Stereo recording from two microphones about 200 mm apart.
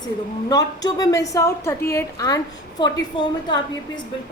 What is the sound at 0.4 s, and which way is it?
A woman's voice, 20° left (ahead or behind).